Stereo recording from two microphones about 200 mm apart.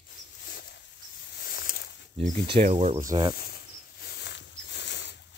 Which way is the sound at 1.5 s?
50° left (ahead or behind).